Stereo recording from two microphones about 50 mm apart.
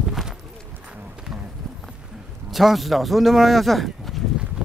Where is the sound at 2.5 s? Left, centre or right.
Centre.